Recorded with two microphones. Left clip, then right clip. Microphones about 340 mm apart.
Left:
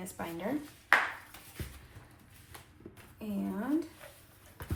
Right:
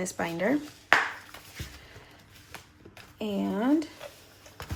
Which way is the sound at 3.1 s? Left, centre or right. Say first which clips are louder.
Right 9 dB; right.